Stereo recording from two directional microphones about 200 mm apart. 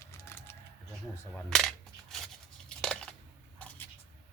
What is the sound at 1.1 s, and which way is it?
Cap gun, 5° left (ahead or behind).